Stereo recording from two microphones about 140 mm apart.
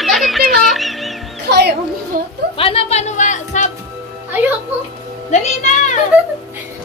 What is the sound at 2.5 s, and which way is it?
Speech, 45° left (ahead or behind).